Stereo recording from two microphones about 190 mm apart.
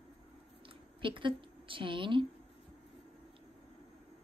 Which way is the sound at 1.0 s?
25° right (ahead or behind).